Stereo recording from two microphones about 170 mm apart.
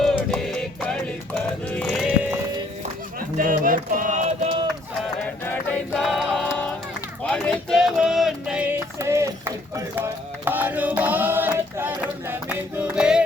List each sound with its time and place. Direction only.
0.0 s music: centre (ahead or behind)
3.2 s a sound: 55° right (ahead or behind)
4.4 s run: 30° right (ahead or behind)
5.5 s choir: 5° left (ahead or behind)
6.5 s music: 10° left (ahead or behind)
7.2 s a sound: 5° left (ahead or behind)